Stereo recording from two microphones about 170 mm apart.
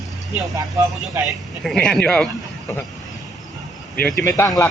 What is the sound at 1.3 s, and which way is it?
A man's voice, centre (ahead or behind).